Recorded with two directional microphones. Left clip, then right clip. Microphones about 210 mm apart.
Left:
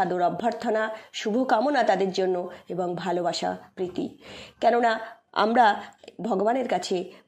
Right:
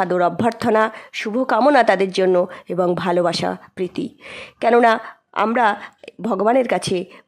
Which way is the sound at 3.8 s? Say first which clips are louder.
Right 5 dB; 60° right (ahead or behind).